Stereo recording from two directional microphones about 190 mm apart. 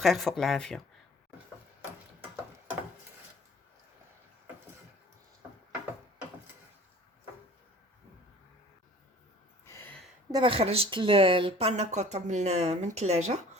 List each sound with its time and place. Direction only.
0.0 s speech: centre (ahead or behind)
9.6 s a sound: 10° left (ahead or behind)
10.3 s a woman's voice: 30° right (ahead or behind)